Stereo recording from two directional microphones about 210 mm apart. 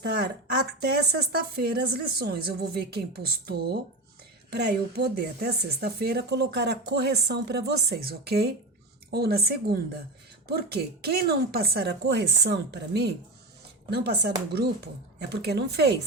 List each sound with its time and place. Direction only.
0.0 s speech: 50° right (ahead or behind)